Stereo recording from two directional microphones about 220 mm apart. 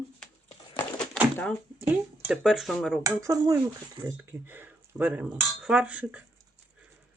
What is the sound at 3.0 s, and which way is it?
Speech, 15° right (ahead or behind).